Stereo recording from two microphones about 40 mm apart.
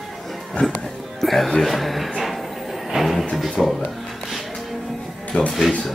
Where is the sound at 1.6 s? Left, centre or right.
Centre.